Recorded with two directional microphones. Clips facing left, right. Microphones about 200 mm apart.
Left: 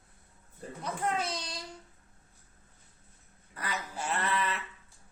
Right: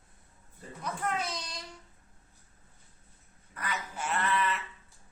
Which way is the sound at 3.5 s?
35° left (ahead or behind).